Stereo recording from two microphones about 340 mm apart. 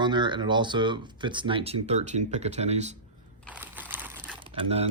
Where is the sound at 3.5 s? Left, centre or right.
Centre.